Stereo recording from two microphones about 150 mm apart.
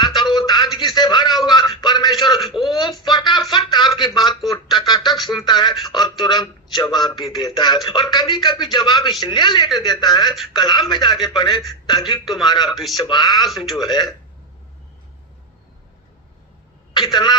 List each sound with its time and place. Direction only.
0.0 s a sound: 30° left (ahead or behind)
4.9 s music: 30° left (ahead or behind)
5.5 s a man's voice: 30° left (ahead or behind)
12.2 s speech: centre (ahead or behind)
13.0 s speech: 30° left (ahead or behind)
13.5 s speech: centre (ahead or behind)
16.9 s speech: 30° left (ahead or behind)